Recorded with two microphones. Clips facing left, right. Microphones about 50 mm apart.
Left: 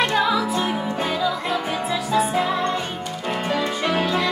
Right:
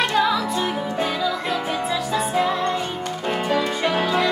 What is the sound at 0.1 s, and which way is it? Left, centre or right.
Music, centre.